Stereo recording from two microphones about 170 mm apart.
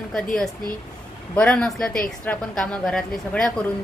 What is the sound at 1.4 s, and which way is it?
A woman's voice, 5° left (ahead or behind).